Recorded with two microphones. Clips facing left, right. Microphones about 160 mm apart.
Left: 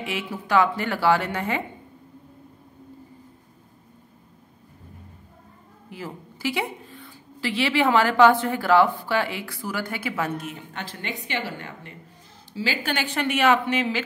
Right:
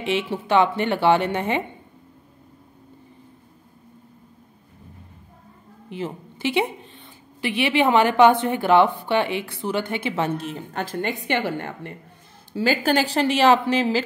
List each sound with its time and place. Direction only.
0.0 s a woman's voice: 25° right (ahead or behind)
5.9 s a woman's voice: 25° right (ahead or behind); by 11.9 s 55° right (ahead or behind)
12.5 s a woman's voice: 45° right (ahead or behind)